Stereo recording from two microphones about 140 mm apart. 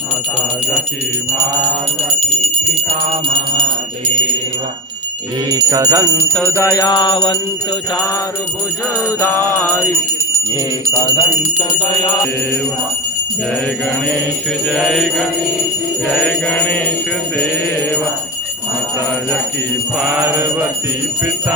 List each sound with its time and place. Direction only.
3.6 s jingle bell: 35° right (ahead or behind)
5.5 s music: 25° right (ahead or behind)
6.7 s music: 30° left (ahead or behind)
9.2 s music: 20° left (ahead or behind)
10.9 s music: 35° left (ahead or behind)
14.7 s jingle bell: 5° left (ahead or behind)
16.2 s music: 10° left (ahead or behind)
20.0 s mantra: 10° right (ahead or behind)